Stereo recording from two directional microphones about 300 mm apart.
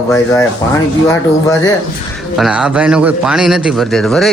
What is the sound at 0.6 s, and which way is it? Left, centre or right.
Speech, centre.